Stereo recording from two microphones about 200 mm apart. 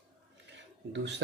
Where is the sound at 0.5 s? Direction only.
65° right (ahead or behind).